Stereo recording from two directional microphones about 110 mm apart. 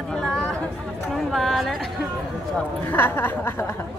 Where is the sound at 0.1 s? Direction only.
5° left (ahead or behind).